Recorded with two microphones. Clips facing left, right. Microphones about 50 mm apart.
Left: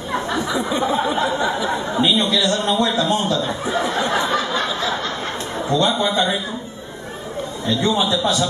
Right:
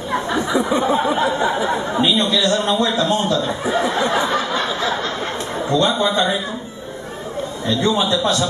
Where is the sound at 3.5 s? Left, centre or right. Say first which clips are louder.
Right 2 dB; centre.